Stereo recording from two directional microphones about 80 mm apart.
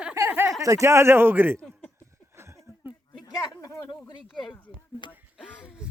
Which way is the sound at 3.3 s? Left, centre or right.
Left.